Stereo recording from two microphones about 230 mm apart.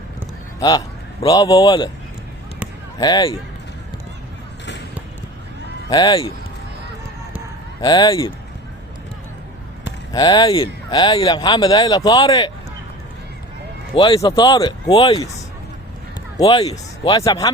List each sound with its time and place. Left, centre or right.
1.2 s speech: centre
3.0 s speech: centre
5.9 s speech: centre
7.8 s speech: centre
10.1 s speech: centre
13.9 s speech: left
16.4 s speech: centre